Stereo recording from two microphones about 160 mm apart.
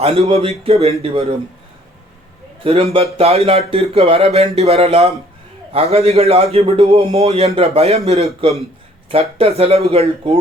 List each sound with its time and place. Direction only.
0.0 s speech: 40° right (ahead or behind)
2.6 s speech: 35° right (ahead or behind)